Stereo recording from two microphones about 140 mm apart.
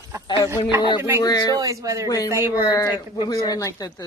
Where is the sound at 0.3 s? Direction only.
25° left (ahead or behind).